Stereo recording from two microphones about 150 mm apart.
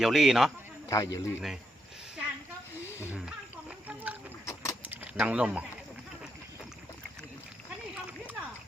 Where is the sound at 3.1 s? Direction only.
5° right (ahead or behind).